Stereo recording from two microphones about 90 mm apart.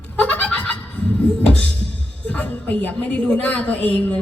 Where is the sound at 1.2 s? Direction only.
10° left (ahead or behind).